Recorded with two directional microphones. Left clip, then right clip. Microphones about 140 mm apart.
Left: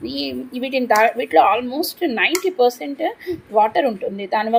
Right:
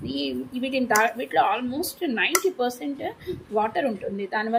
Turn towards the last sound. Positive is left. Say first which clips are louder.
# left 7 dB
turn(degrees=25)  # may be behind; listen again after turning